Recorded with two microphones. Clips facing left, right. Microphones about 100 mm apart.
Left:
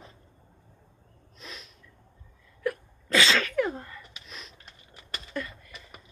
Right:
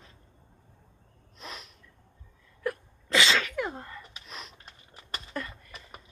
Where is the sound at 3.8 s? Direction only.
25° right (ahead or behind).